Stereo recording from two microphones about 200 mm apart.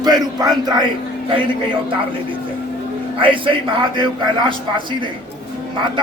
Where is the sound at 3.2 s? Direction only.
25° right (ahead or behind).